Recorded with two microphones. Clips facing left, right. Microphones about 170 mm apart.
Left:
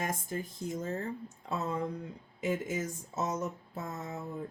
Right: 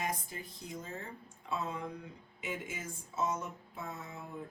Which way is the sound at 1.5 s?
40° left (ahead or behind).